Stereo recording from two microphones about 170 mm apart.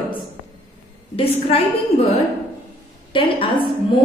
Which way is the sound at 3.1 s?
30° left (ahead or behind).